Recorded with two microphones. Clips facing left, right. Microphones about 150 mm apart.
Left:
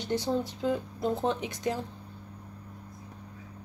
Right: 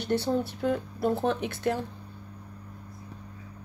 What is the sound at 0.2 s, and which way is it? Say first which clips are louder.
Speech: right 2 dB; 15° left (ahead or behind).